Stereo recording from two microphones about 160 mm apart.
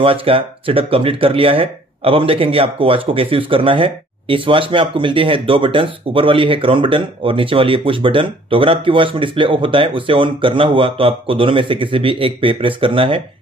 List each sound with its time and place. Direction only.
0.0 s speech: 35° right (ahead or behind)